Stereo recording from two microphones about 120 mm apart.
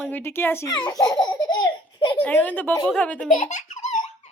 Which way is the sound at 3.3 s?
90° left.